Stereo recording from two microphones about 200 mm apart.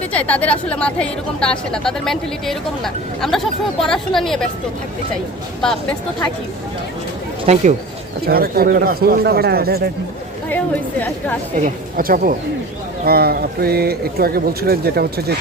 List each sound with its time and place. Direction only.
0.1 s a woman's voice: 5° left (ahead or behind)
7.5 s speech: 35° right (ahead or behind)
8.3 s speech: 50° right (ahead or behind)
11.5 s speech: 40° right (ahead or behind)